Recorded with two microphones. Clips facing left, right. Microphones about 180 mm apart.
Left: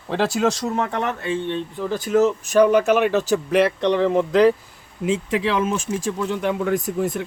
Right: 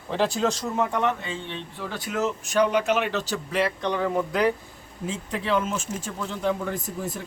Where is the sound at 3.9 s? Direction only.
25° left (ahead or behind).